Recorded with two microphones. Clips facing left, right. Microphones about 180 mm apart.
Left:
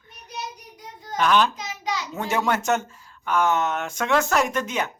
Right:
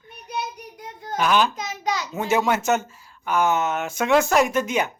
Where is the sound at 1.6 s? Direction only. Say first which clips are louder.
Right 3 dB; 45° right (ahead or behind).